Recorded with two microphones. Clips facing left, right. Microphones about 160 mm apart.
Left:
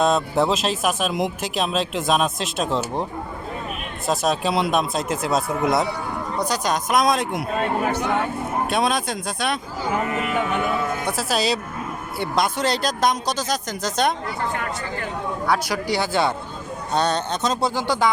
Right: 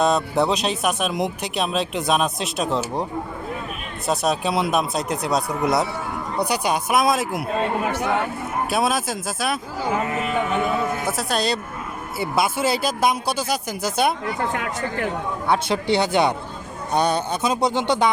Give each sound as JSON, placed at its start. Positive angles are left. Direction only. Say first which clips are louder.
{"t": 0.0, "sound": "speech", "louder": "even", "side_deg": 0}
{"t": 6.4, "sound": "speech", "louder": "right 2 dB", "side_deg": -10}
{"t": 11.0, "sound": "speech", "louder": "even", "side_deg": 0}
{"t": 15.4, "sound": "speech", "louder": "right 3 dB", "side_deg": -25}